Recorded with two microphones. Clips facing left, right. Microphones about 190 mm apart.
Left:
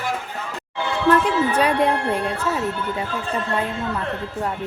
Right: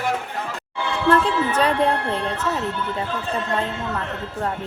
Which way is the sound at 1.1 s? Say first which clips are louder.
Left 1 dB; 15° left (ahead or behind).